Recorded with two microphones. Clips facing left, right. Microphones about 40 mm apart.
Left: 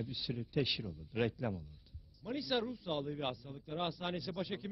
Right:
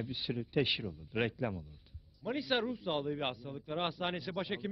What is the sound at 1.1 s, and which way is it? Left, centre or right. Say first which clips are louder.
A man's voice: right 1 dB; right.